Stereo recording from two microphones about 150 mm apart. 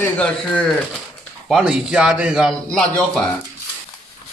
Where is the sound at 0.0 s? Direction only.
10° left (ahead or behind).